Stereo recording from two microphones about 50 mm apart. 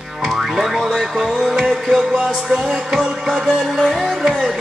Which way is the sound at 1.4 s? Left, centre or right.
Centre.